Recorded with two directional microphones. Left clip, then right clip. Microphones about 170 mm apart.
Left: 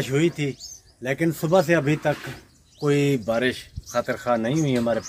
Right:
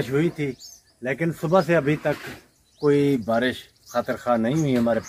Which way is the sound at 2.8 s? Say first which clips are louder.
Right 2 dB; 75° left (ahead or behind).